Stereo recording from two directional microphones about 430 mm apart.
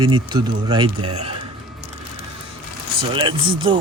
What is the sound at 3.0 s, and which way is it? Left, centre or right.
Speech, centre.